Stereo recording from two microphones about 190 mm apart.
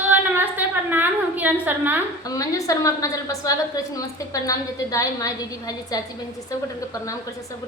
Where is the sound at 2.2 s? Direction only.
20° left (ahead or behind).